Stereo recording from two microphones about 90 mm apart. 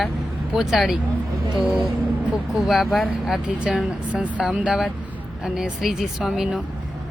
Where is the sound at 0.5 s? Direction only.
5° right (ahead or behind).